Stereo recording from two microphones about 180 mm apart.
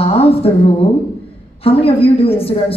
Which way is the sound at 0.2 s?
30° left (ahead or behind).